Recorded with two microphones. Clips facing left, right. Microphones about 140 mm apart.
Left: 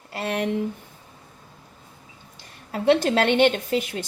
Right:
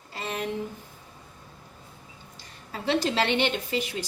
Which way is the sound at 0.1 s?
65° left (ahead or behind).